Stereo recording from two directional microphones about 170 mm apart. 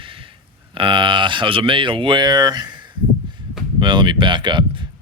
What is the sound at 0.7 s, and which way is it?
Speech, 30° right (ahead or behind).